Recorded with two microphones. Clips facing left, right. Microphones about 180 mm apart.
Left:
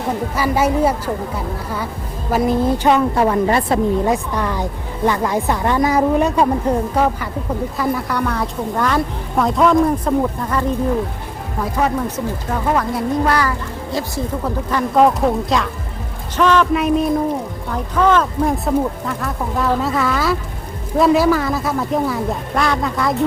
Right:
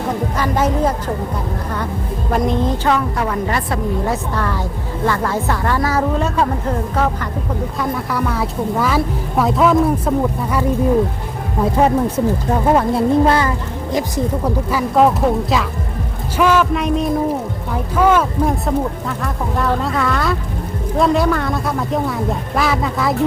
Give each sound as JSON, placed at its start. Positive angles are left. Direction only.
{"t": 0.3, "sound": "speech", "side_deg": 10}
{"t": 2.3, "sound": "speech", "side_deg": 5}
{"t": 7.8, "sound": "a woman's voice", "side_deg": 0}
{"t": 11.6, "sound": "speech", "side_deg": -30}
{"t": 14.4, "sound": "a woman's voice", "side_deg": -5}
{"t": 16.7, "sound": "a woman's voice", "side_deg": 5}
{"t": 17.7, "sound": "a woman's voice", "side_deg": -10}